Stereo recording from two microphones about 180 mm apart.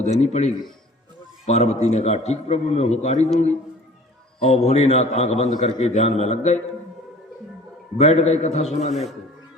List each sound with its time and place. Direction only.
0.0 s a man's voice: 35° left (ahead or behind)
4.4 s a man's voice: 35° left (ahead or behind)
7.9 s a man's voice: 35° left (ahead or behind)